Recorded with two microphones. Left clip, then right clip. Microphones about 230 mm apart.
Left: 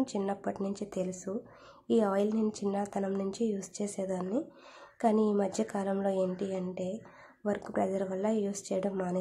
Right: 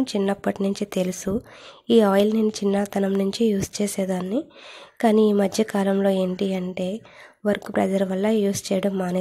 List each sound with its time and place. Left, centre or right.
0.0 s speech: right